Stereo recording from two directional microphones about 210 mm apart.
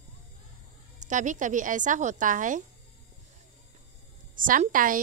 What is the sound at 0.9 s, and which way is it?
A woman's voice, 35° right (ahead or behind).